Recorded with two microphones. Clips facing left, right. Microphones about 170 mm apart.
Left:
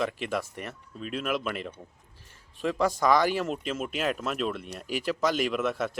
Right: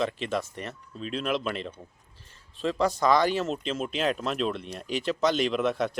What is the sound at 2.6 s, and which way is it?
Speech, 10° left (ahead or behind).